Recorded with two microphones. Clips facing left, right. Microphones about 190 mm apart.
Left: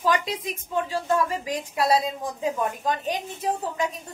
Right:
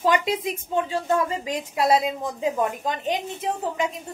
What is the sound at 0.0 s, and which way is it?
A woman's voice, 25° right (ahead or behind).